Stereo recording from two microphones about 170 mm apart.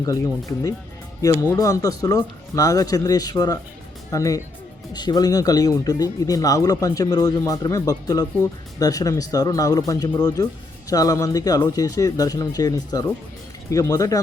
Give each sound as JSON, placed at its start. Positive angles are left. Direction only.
{"t": 1.2, "sound": "speech", "side_deg": 20}